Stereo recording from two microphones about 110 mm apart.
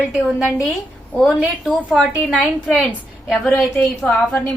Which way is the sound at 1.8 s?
15° right (ahead or behind).